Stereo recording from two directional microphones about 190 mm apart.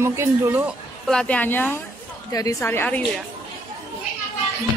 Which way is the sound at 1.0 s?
5° left (ahead or behind).